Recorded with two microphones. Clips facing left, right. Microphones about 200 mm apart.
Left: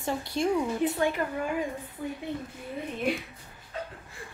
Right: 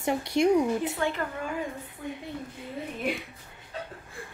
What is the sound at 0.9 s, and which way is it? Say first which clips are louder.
Speech: left 2 dB; 15° left (ahead or behind).